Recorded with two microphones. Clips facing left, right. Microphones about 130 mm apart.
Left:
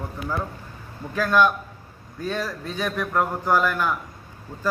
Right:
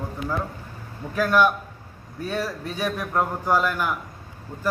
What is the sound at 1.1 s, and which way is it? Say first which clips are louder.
A man's voice: even; 10° right (ahead or behind).